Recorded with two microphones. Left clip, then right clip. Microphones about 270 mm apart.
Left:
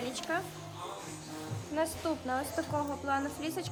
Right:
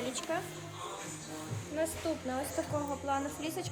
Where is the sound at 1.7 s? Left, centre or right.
Centre.